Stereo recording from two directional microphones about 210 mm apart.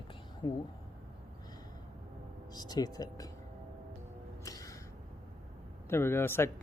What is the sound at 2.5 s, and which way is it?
Speech, 20° left (ahead or behind).